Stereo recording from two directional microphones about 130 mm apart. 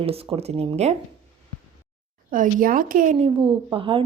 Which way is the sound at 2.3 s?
90° right.